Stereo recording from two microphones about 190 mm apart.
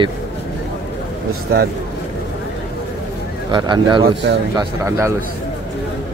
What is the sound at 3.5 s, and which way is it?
Speech, 25° right (ahead or behind).